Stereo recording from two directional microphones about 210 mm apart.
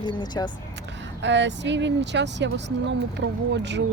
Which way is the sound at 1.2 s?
60° right (ahead or behind).